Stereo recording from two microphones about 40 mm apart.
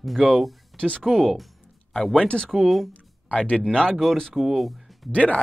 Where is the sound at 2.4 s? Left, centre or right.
Centre.